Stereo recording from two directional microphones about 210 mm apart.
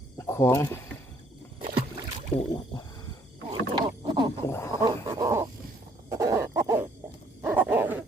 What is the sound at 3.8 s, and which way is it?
Wild animals, 20° right (ahead or behind).